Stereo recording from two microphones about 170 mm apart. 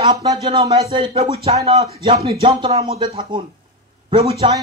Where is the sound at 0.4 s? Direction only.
35° right (ahead or behind).